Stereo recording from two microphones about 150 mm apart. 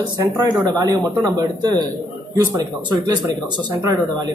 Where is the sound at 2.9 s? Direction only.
30° right (ahead or behind).